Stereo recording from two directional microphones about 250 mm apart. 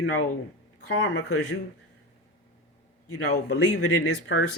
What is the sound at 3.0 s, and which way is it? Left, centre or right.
A man's voice, left.